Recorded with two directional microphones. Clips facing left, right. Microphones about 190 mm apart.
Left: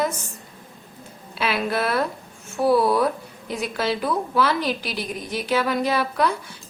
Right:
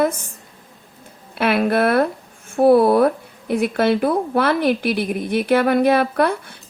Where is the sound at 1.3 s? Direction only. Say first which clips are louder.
Right 7 dB; 55° right (ahead or behind).